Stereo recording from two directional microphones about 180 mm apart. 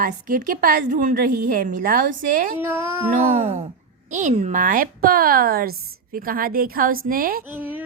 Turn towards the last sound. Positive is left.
turn(degrees=-10)  # may be behind; listen again after turning